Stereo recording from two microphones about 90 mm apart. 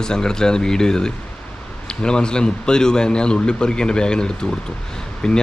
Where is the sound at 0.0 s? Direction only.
10° left (ahead or behind).